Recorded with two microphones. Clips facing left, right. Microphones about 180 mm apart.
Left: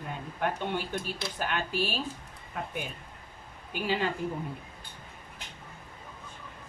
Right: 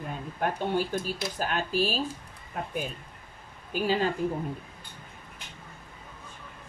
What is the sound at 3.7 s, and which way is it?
Speech, 40° right (ahead or behind).